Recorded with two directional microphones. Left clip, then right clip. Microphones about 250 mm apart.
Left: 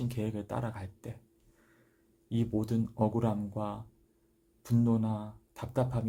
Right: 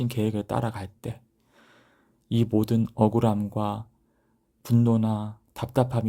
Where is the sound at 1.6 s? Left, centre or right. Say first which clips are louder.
Right 11 dB; right.